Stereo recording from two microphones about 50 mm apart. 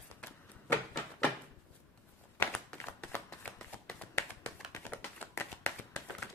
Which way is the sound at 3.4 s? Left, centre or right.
Left.